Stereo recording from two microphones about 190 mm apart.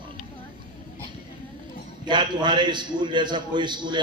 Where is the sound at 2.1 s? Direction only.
25° right (ahead or behind).